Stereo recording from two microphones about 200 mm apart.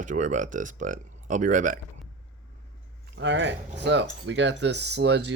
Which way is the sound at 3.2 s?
65° right (ahead or behind).